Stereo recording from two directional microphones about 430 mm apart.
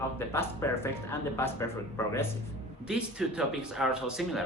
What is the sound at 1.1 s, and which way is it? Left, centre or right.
Speech, centre.